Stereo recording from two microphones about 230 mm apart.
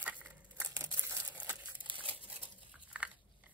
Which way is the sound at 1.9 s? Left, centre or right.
Right.